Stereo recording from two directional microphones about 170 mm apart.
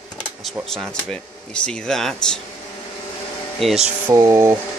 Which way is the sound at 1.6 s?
5° left (ahead or behind).